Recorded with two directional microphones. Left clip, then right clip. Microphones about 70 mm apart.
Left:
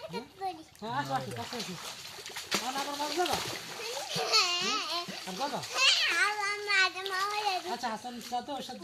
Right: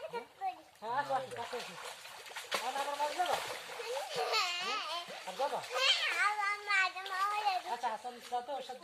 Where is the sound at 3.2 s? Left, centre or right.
Centre; by 8.5 s left.